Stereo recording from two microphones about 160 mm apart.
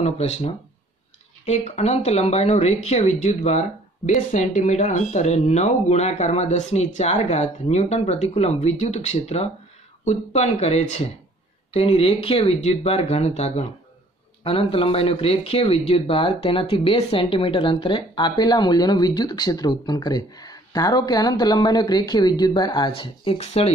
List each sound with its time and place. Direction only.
0.0 s speech: 45° left (ahead or behind)